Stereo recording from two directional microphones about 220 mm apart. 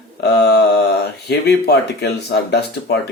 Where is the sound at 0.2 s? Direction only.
50° left (ahead or behind).